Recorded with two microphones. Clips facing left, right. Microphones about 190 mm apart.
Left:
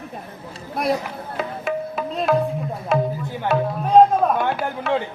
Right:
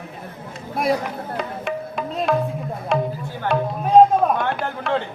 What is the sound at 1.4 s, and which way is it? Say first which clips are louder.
Music: left 4 dB; centre (ahead or behind).